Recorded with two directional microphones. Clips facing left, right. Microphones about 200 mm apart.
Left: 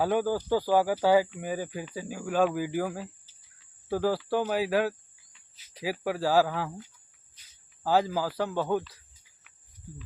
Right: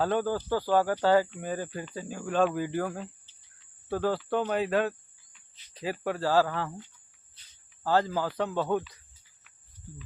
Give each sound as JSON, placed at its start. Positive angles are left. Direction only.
{"t": 0.0, "sound": "speech", "side_deg": 10}
{"t": 7.9, "sound": "speech", "side_deg": 10}